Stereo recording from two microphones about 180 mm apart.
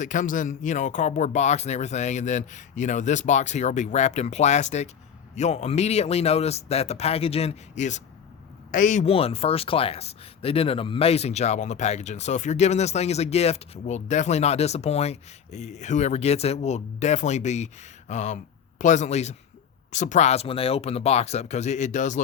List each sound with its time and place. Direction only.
0.0 s speech: 45° left (ahead or behind)